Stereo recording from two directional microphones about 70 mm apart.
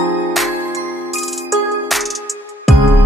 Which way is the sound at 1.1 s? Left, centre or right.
Centre.